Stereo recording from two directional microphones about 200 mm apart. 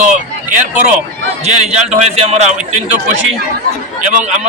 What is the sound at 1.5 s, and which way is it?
A man's voice, 35° right (ahead or behind).